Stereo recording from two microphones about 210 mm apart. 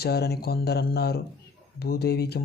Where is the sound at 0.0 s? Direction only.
50° left (ahead or behind).